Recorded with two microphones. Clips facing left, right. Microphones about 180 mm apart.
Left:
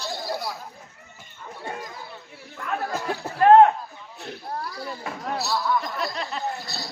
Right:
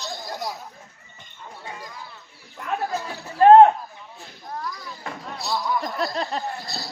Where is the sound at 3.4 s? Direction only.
30° right (ahead or behind).